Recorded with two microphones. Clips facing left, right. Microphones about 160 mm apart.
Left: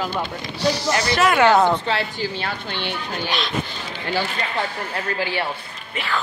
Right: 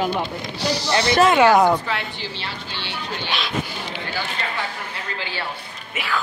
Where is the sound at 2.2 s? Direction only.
50° left (ahead or behind).